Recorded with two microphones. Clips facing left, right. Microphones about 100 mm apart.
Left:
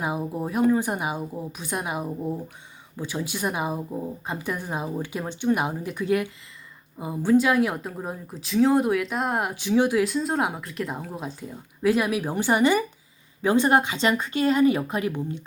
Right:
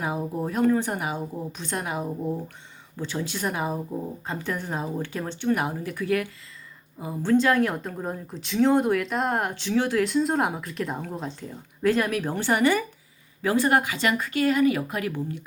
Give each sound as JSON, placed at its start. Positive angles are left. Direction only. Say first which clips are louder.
{"t": 0.0, "sound": "speech", "louder": "even", "side_deg": 15}
{"t": 10.0, "sound": "speech", "louder": "right 1 dB", "side_deg": 0}